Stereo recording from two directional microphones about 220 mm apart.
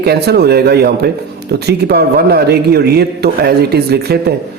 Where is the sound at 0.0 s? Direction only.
45° right (ahead or behind).